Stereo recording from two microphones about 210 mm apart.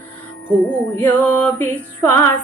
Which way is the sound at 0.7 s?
10° left (ahead or behind).